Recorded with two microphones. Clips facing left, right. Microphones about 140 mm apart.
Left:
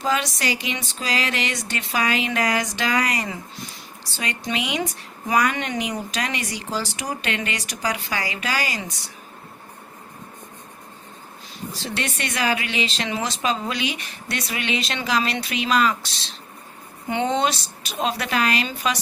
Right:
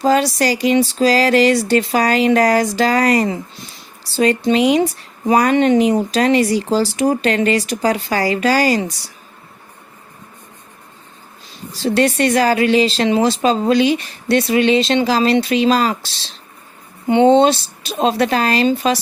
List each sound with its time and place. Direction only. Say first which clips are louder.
0.0 s speech: right 9 dB; 35° right (ahead or behind)
11.8 s speech: right 15 dB; 35° right (ahead or behind)